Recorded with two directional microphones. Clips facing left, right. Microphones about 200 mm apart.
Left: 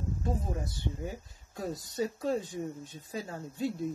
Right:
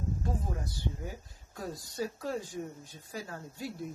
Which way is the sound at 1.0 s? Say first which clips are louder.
Left 3 dB; 20° left (ahead or behind).